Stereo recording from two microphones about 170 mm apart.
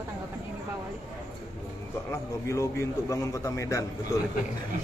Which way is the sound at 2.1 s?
15° left (ahead or behind).